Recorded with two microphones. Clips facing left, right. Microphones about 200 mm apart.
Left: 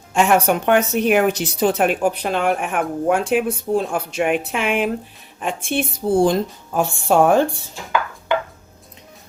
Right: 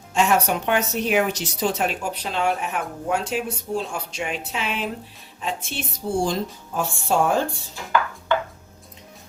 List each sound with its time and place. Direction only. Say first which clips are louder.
0.1 s a woman's voice: left 4 dB; 55° left (ahead or behind)